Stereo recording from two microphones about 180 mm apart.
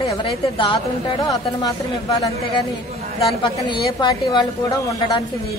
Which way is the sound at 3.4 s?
25° left (ahead or behind).